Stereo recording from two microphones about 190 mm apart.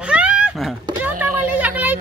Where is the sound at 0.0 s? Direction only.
5° right (ahead or behind).